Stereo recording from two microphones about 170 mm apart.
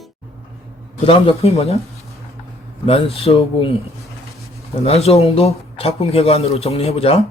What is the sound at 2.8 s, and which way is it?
Speech, 35° left (ahead or behind).